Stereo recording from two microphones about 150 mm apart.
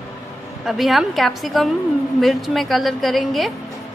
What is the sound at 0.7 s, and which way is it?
A woman's voice, centre (ahead or behind).